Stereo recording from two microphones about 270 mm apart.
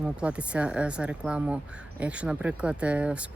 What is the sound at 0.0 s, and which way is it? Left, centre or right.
Speech, centre.